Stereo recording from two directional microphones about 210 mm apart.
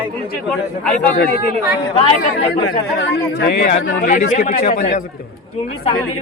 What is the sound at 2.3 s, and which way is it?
Speech, 60° left (ahead or behind).